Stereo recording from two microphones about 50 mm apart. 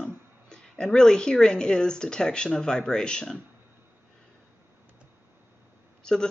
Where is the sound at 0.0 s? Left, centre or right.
Centre.